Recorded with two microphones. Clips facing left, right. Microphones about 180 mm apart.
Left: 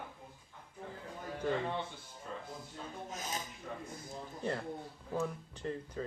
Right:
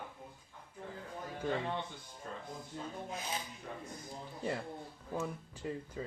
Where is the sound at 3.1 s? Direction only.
45° left (ahead or behind).